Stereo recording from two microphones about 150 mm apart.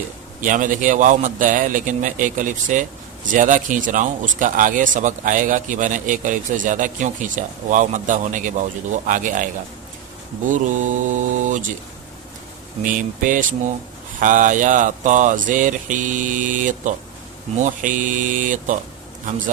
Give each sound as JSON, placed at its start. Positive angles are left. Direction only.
{"t": 0.4, "sound": "speech", "side_deg": -60}
{"t": 12.8, "sound": "speech", "side_deg": -60}